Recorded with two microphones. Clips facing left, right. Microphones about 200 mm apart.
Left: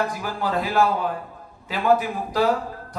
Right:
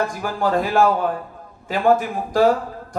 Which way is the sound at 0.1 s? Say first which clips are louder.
Right 5 dB; 45° right (ahead or behind).